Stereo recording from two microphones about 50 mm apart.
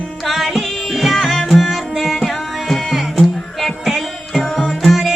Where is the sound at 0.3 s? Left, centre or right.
Centre.